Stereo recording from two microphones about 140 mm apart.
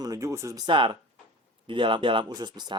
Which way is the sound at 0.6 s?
35° right (ahead or behind).